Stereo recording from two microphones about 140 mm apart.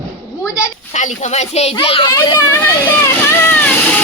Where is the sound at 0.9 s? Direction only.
60° left (ahead or behind); by 2.5 s 30° left (ahead or behind).